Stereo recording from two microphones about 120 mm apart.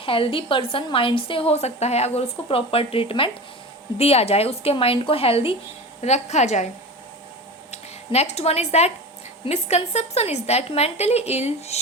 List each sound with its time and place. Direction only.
0.0 s a woman's voice: 50° left (ahead or behind)
6.0 s a woman's voice: 70° left (ahead or behind)
7.7 s a woman's voice: 65° left (ahead or behind)